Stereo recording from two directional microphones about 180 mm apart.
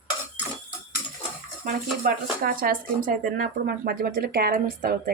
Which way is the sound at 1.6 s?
55° right (ahead or behind).